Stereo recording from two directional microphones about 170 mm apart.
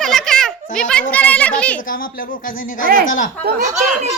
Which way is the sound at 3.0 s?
50° left (ahead or behind).